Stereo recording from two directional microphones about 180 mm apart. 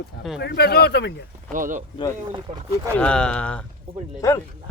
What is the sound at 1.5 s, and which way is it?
Speech, 50° right (ahead or behind).